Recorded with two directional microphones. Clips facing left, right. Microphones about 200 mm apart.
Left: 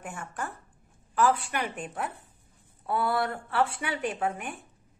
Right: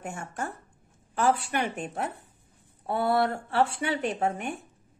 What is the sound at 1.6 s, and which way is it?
Speech, 45° right (ahead or behind).